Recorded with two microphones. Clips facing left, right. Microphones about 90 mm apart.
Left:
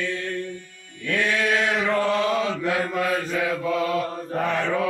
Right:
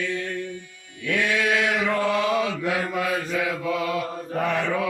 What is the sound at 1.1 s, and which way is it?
Chant, 40° left (ahead or behind).